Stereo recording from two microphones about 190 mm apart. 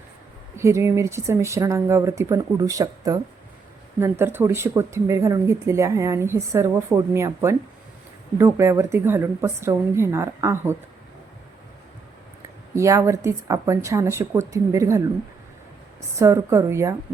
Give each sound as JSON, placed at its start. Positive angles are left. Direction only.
{"t": 0.5, "sound": "speech", "side_deg": -15}
{"t": 12.7, "sound": "speech", "side_deg": -15}
{"t": 16.1, "sound": "speech", "side_deg": -15}